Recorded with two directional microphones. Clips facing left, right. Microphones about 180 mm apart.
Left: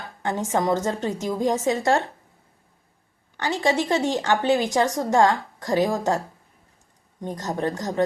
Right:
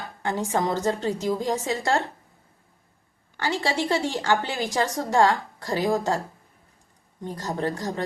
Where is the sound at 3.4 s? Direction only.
20° left (ahead or behind).